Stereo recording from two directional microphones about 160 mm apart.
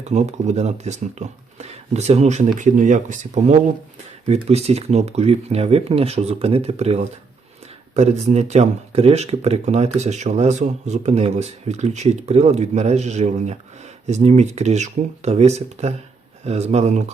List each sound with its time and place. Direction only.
0.1 s speech: 45° right (ahead or behind)